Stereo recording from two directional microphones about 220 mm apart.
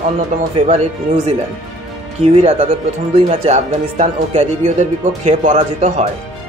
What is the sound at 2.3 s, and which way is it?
Speech, 30° right (ahead or behind).